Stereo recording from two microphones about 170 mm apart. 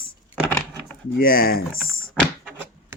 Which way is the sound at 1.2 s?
60° left (ahead or behind).